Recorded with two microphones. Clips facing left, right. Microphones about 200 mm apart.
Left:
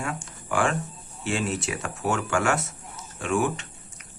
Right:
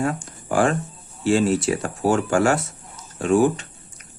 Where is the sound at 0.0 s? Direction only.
35° right (ahead or behind).